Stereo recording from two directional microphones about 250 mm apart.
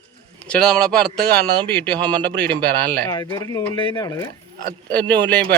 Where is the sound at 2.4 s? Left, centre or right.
Right.